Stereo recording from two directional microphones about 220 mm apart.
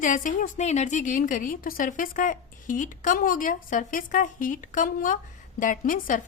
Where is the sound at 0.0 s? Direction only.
35° left (ahead or behind).